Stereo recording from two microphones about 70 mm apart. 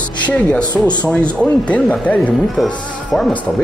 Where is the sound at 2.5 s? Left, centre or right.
Centre.